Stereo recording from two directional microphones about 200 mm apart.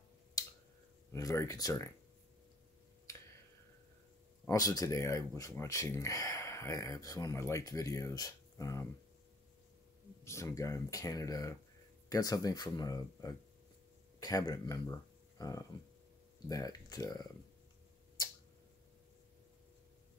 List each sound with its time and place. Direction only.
1.1 s speech: 15° left (ahead or behind)
3.1 s finger snapping: 15° left (ahead or behind)
4.5 s speech: 15° left (ahead or behind)
10.2 s speech: 15° left (ahead or behind)